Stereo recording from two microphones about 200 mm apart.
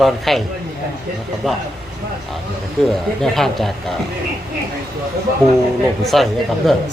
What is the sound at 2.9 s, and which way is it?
A man's voice, centre (ahead or behind).